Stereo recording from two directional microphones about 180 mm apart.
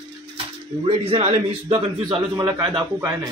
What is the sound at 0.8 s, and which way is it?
Speech, 35° right (ahead or behind).